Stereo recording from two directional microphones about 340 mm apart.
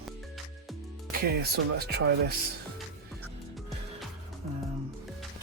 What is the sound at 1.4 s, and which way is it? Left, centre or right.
Speech, right.